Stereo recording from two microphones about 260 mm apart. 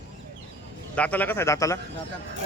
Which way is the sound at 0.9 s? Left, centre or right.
Centre.